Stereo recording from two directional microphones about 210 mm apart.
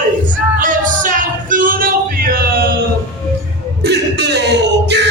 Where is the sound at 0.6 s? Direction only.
40° right (ahead or behind).